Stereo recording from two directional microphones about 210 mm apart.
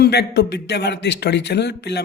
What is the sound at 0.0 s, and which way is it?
A man's voice, 50° left (ahead or behind).